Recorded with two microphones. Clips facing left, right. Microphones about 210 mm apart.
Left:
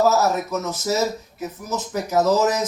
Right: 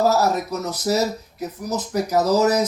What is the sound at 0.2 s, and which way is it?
Speech, 35° right (ahead or behind).